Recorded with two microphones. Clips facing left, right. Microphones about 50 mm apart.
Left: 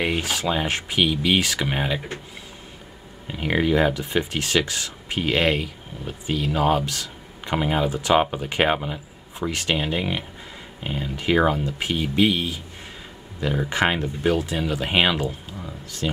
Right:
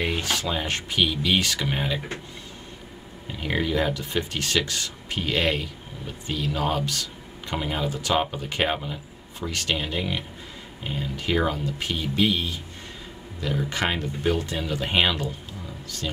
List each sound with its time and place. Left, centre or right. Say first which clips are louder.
0.0 s speech: left 3 dB; centre
3.3 s speech: left 5 dB; centre
7.5 s speech: left 5 dB; centre
13.8 s speech: left 5 dB; left
14.3 s speech: left 3 dB; centre
16.0 s speech: left 5 dB; left